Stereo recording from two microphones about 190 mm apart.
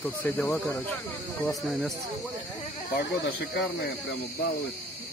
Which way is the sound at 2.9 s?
60° left (ahead or behind).